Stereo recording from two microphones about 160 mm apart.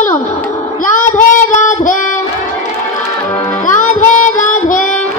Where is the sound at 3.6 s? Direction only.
50° left (ahead or behind).